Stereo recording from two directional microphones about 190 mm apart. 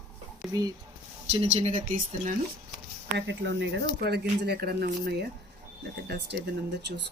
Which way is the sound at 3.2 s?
65° right (ahead or behind).